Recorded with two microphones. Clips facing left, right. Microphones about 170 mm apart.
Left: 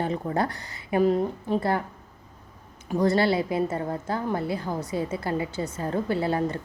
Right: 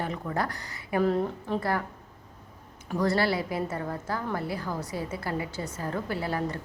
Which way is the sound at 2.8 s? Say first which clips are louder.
Left 4 dB; 20° left (ahead or behind).